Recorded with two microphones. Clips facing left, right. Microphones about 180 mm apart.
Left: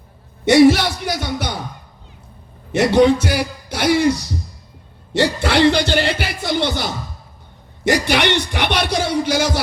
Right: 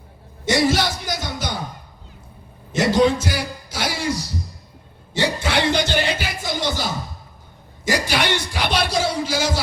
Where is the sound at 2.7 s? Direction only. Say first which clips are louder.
Left 4 dB; 65° left (ahead or behind).